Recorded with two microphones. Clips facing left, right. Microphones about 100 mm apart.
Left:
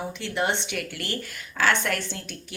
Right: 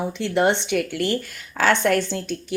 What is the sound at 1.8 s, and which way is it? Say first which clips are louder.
Speech: right 9 dB; 40° right (ahead or behind).